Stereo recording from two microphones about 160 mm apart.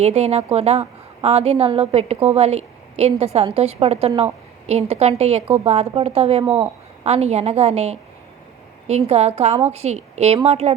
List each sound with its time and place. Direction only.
0.0 s a woman's voice: 40° right (ahead or behind)
6.4 s speech: 10° right (ahead or behind)
7.0 s a woman's voice: 40° right (ahead or behind)